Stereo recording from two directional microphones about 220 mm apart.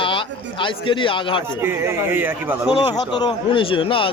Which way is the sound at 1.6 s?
10° right (ahead or behind).